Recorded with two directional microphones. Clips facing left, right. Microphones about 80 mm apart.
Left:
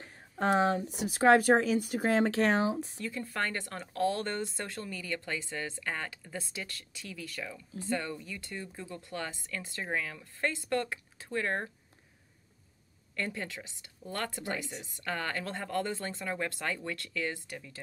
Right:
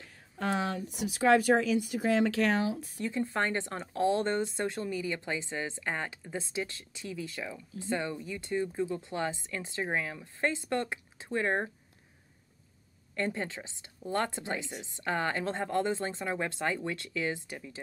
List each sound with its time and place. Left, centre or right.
0.0 s speech: left
3.0 s speech: right
13.1 s speech: right